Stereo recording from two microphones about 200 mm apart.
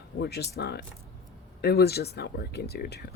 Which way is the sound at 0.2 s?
55° left (ahead or behind).